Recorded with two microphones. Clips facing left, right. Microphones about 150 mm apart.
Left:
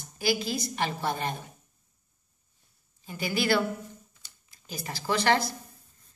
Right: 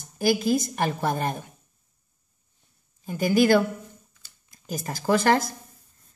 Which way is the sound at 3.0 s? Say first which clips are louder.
Right 8 dB; 45° right (ahead or behind).